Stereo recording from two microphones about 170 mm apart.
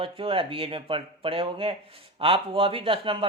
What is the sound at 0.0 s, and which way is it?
Speech, 35° right (ahead or behind).